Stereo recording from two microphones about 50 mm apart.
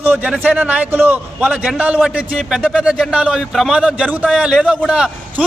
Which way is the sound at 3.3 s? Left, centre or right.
Centre.